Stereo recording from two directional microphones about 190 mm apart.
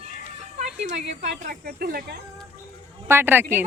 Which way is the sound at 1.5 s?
55° right (ahead or behind).